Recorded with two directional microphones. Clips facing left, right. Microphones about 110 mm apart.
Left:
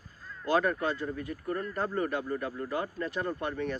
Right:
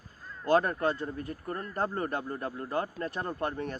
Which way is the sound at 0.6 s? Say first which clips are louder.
Even; 40° right (ahead or behind).